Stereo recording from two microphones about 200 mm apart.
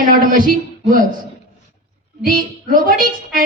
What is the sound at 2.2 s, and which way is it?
A man's voice, 45° right (ahead or behind).